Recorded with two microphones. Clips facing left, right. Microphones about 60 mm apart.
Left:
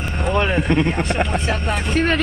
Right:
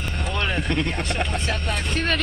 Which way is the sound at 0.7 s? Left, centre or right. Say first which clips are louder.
Left 6 dB; centre.